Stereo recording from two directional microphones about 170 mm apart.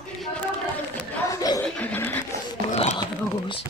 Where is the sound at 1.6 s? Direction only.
5° left (ahead or behind).